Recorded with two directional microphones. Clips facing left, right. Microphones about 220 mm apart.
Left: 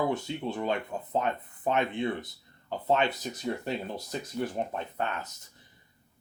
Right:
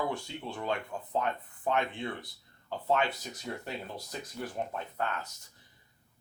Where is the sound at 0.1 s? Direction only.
20° left (ahead or behind).